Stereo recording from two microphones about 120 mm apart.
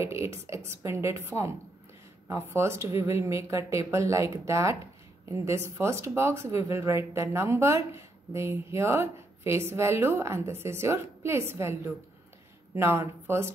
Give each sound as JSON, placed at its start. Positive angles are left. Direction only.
{"t": 0.0, "sound": "speech", "side_deg": -25}